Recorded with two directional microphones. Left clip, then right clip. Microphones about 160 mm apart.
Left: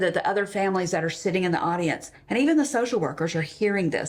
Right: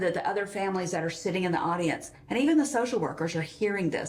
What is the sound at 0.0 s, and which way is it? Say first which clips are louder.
Speech: left 5 dB; 35° left (ahead or behind).